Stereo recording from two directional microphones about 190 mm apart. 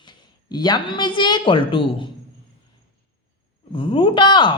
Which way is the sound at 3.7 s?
25° left (ahead or behind).